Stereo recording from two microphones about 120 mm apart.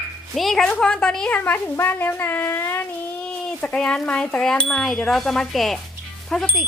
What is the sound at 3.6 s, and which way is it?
Speech, 5° left (ahead or behind).